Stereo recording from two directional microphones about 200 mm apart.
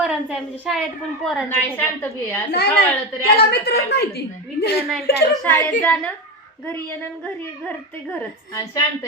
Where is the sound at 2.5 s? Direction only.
50° left (ahead or behind).